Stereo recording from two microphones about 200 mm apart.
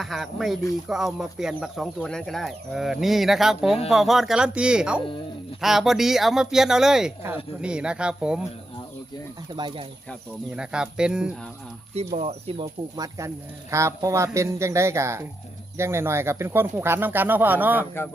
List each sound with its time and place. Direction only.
0.0 s speech: centre (ahead or behind)
9.5 s speech: 20° right (ahead or behind)
10.1 s speech: 5° right (ahead or behind)
11.9 s speech: 30° right (ahead or behind)
13.1 s speech: 15° right (ahead or behind)